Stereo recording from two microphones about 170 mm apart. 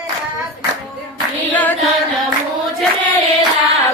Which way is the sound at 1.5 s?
10° left (ahead or behind).